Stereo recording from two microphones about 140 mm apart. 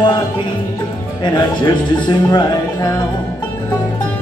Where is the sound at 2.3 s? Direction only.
30° left (ahead or behind).